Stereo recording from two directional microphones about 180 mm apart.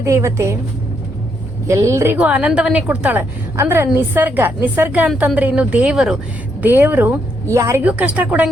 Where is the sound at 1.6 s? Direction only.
15° right (ahead or behind).